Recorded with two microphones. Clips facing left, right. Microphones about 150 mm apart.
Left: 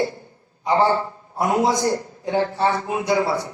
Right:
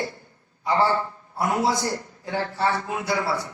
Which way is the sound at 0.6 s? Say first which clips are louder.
Left 3 dB; 20° left (ahead or behind).